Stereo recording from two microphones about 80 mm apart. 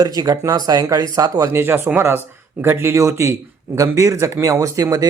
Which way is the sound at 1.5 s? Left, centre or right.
Right.